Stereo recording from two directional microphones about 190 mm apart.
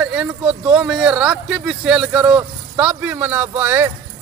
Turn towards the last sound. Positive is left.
turn(degrees=-10)  # may be behind; listen again after turning